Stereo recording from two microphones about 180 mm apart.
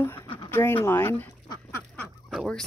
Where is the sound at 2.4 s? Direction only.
Centre (ahead or behind).